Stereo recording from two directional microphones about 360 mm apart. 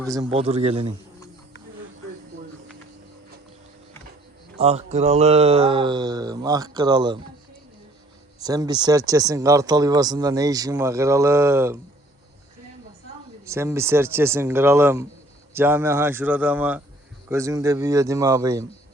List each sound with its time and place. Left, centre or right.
0.0 s speech: centre
4.5 s speech: centre
8.4 s speech: centre
13.4 s speech: centre